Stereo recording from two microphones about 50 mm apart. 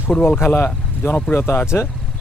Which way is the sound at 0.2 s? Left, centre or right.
Left.